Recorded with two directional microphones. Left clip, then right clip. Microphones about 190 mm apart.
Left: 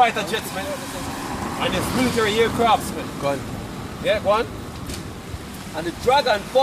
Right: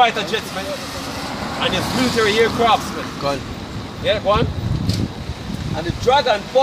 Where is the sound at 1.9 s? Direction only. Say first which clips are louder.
Right 2 dB; 50° right (ahead or behind).